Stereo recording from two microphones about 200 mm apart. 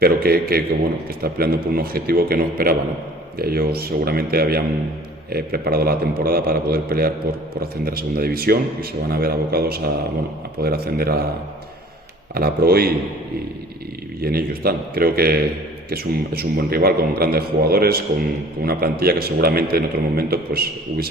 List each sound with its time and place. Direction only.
0.0 s a man's voice: 50° right (ahead or behind)
12.3 s a man's voice: 50° right (ahead or behind)
14.2 s a man's voice: 50° right (ahead or behind)